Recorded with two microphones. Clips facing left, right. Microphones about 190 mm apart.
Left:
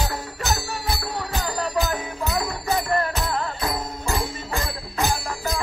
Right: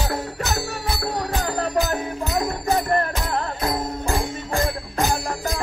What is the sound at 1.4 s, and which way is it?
Music, 55° right (ahead or behind).